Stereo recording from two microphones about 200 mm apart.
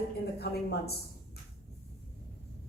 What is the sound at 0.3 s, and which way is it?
Speech, 55° left (ahead or behind).